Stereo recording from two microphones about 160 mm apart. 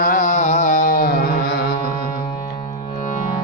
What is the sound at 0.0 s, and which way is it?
Carnatic music, 55° left (ahead or behind).